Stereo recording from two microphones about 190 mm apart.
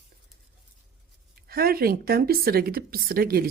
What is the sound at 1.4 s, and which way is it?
Speech, 55° right (ahead or behind).